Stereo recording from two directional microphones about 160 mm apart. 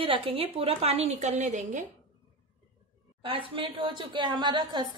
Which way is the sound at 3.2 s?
35° right (ahead or behind).